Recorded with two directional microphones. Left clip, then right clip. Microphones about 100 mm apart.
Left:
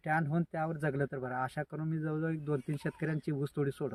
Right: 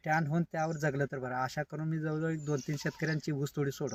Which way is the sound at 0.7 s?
15° left (ahead or behind).